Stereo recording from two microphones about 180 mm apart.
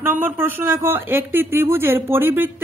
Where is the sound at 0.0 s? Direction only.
10° right (ahead or behind).